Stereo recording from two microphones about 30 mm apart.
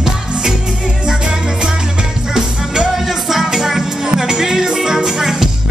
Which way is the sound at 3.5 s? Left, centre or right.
Centre.